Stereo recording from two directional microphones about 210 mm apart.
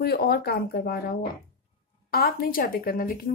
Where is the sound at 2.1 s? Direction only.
45° left (ahead or behind).